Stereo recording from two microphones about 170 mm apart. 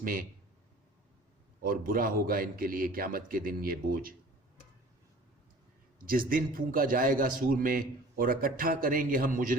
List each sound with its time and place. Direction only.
0.0 s a man's voice: 55° right (ahead or behind)
1.6 s a man's voice: 55° right (ahead or behind)
6.1 s a man's voice: 55° right (ahead or behind)